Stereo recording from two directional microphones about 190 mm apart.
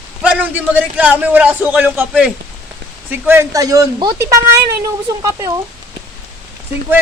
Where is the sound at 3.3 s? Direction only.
15° right (ahead or behind).